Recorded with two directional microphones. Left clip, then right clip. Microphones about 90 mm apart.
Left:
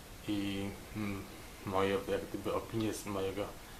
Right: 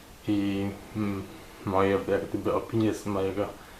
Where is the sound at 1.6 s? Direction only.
30° left (ahead or behind).